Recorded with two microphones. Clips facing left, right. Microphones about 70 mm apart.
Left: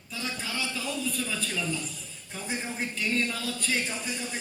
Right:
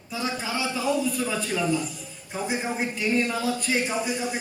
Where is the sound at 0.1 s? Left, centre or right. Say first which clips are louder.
Right 6 dB; centre.